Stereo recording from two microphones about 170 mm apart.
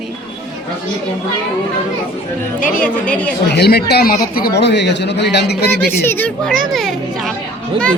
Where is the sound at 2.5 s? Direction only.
50° left (ahead or behind).